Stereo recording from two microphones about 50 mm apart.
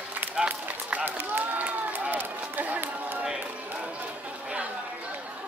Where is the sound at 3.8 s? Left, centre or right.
Right.